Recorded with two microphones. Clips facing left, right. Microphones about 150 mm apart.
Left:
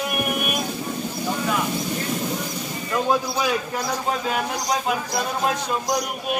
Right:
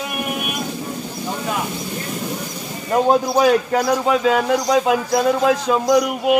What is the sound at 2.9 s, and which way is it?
Speech, 35° right (ahead or behind).